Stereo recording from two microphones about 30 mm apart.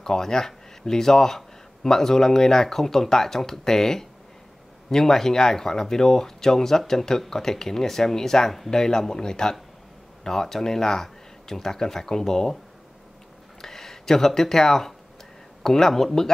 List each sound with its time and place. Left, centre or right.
0.0 s a man's voice: centre
13.6 s speech: centre